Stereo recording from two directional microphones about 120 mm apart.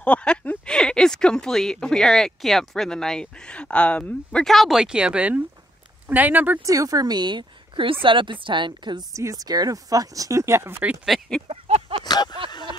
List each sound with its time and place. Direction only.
0.0 s speech: 10° left (ahead or behind); by 6.6 s 15° right (ahead or behind)
6.6 s speech: 30° right (ahead or behind)
9.1 s speech: 25° right (ahead or behind)
11.1 s speech: 5° left (ahead or behind)
11.4 s a sound: 55° right (ahead or behind)
12.0 s a sound: 35° left (ahead or behind)